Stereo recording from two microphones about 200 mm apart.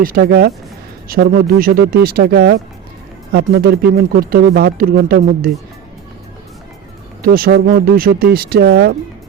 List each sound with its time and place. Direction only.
0.0 s speech: 45° right (ahead or behind)
7.2 s speech: 50° right (ahead or behind)